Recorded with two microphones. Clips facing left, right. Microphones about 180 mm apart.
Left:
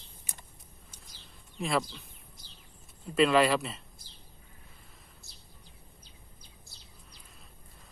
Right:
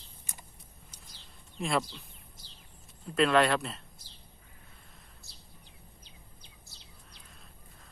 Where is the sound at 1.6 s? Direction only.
Centre (ahead or behind).